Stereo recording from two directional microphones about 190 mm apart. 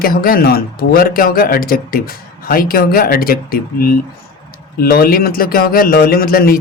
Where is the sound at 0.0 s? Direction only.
50° left (ahead or behind).